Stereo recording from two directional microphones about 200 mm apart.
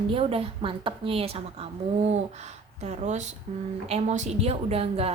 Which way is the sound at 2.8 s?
35° right (ahead or behind).